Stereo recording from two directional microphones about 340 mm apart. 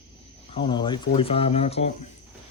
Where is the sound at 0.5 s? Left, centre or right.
Centre.